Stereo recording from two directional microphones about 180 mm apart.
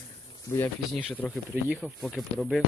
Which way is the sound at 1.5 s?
5° right (ahead or behind).